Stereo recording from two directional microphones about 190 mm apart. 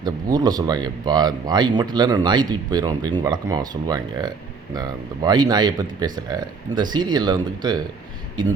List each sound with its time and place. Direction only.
0.0 s speech: 20° right (ahead or behind)